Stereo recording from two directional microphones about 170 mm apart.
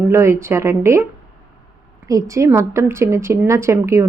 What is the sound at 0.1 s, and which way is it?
Speech, 15° right (ahead or behind).